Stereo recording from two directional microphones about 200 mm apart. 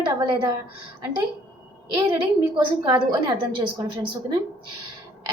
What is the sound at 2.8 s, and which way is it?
Speech, 20° right (ahead or behind).